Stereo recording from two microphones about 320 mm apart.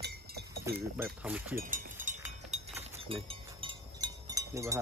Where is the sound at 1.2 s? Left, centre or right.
Centre.